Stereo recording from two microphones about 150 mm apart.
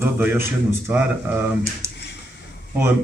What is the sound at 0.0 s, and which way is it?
A man's voice, 15° right (ahead or behind).